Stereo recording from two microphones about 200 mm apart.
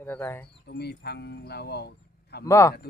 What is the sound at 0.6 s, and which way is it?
Speech, 55° left (ahead or behind).